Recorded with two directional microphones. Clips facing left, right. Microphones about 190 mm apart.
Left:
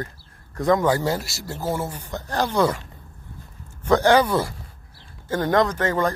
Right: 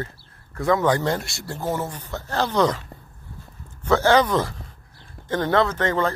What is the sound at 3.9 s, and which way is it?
A man's voice, 15° left (ahead or behind).